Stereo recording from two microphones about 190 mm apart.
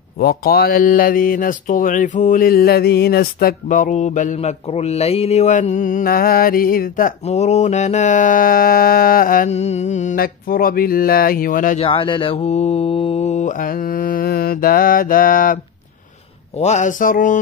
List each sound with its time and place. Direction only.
0.2 s speech: 50° left (ahead or behind)
11.8 s mantra: 25° left (ahead or behind); by 15.6 s 45° left (ahead or behind)
16.5 s speech: 40° left (ahead or behind)